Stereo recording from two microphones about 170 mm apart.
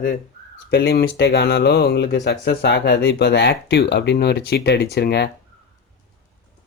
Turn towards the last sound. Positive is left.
turn(degrees=75)  # may be behind; listen again after turning